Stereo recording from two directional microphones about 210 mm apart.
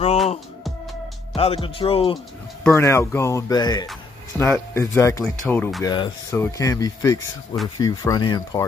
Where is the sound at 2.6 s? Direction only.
10° left (ahead or behind).